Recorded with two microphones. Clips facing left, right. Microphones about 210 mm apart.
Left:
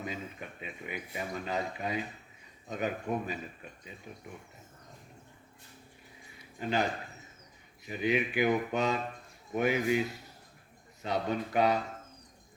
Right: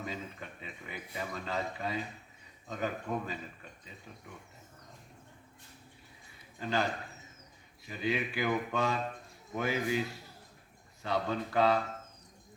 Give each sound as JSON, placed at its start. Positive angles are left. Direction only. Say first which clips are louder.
{"t": 0.0, "sound": "speech", "louder": "left 1 dB", "side_deg": 20}
{"t": 6.6, "sound": "a man's voice", "louder": "left 2 dB", "side_deg": 15}
{"t": 7.9, "sound": "speech", "louder": "left 4 dB", "side_deg": 20}
{"t": 11.0, "sound": "speech", "louder": "left 1 dB", "side_deg": 20}